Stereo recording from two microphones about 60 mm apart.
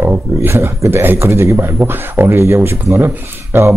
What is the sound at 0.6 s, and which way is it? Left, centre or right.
Speech, right.